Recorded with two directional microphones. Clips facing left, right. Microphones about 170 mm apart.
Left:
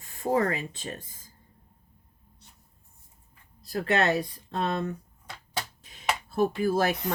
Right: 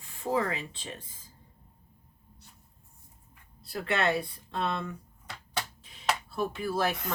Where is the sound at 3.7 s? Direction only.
40° left (ahead or behind).